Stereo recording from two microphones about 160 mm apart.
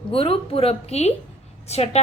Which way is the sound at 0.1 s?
35° left (ahead or behind).